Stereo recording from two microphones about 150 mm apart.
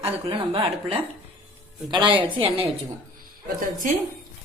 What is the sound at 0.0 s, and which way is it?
Speech, 35° right (ahead or behind).